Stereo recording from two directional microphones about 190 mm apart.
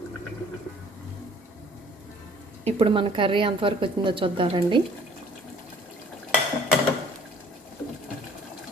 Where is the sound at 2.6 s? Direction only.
30° right (ahead or behind).